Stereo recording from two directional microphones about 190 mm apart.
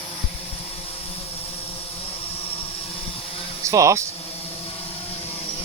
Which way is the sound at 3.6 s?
15° right (ahead or behind).